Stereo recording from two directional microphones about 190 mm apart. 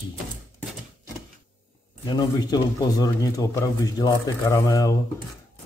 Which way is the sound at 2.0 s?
20° left (ahead or behind).